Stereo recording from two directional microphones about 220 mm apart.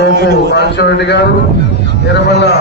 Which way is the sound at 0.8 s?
50° left (ahead or behind).